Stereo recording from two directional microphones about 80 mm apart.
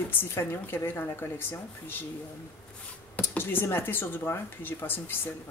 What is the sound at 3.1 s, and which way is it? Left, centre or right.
Speech, left.